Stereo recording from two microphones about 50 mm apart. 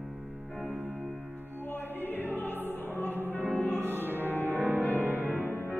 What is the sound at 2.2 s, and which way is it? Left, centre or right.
Music, left.